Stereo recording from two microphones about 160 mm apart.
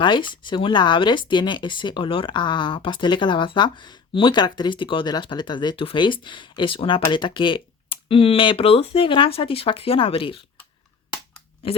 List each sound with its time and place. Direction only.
0.0 s speech: 30° left (ahead or behind)
11.6 s speech: 35° left (ahead or behind)